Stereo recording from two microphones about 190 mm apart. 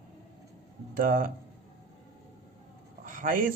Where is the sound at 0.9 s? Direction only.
50° right (ahead or behind).